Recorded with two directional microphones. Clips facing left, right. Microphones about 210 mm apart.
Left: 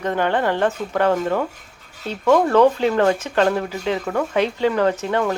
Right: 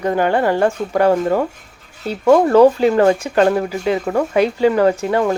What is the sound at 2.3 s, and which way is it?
Speech, 35° right (ahead or behind).